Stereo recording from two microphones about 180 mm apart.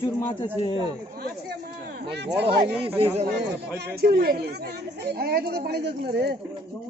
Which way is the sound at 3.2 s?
70° right (ahead or behind).